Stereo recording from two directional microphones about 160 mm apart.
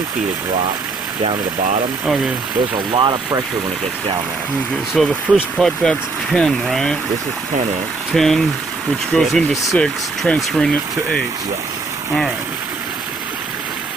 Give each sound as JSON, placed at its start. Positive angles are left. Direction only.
{"t": 2.9, "sound": "speech", "side_deg": -25}
{"t": 4.9, "sound": "speech", "side_deg": 0}
{"t": 8.1, "sound": "speech", "side_deg": 0}